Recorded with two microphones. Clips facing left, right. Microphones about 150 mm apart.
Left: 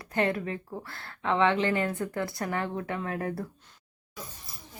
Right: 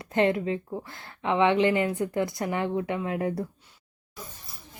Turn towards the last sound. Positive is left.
turn(degrees=-20)  # may be behind; listen again after turning